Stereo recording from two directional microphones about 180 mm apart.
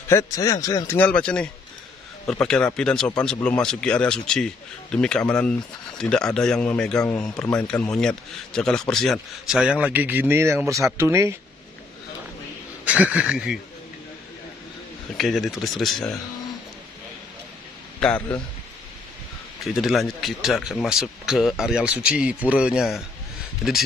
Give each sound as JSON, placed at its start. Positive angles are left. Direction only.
{"t": 0.1, "sound": "a man's voice", "side_deg": 20}
{"t": 12.8, "sound": "speech", "side_deg": -5}
{"t": 15.1, "sound": "a man's voice", "side_deg": 0}
{"t": 18.0, "sound": "speech", "side_deg": 10}
{"t": 19.6, "sound": "a man's voice", "side_deg": 0}